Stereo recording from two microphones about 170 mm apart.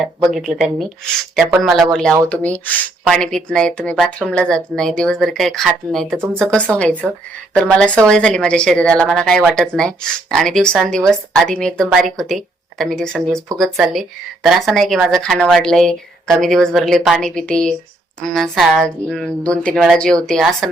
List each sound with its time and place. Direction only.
0.3 s speech: centre (ahead or behind)